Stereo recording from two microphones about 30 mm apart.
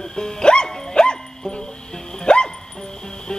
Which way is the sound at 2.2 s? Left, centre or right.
Left.